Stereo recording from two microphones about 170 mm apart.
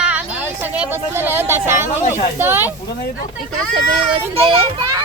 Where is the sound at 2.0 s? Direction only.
45° left (ahead or behind).